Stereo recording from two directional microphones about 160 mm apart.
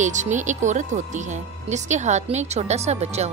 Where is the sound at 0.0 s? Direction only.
50° right (ahead or behind).